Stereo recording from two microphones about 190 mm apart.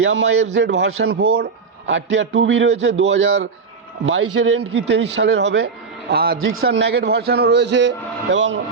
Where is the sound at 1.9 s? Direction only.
75° right (ahead or behind).